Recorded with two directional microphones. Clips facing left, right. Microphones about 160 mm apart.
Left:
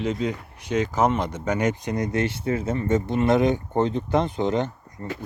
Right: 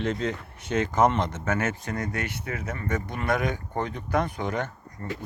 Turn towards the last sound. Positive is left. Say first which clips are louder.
# left 5 dB
turn(degrees=20)  # may be behind; listen again after turning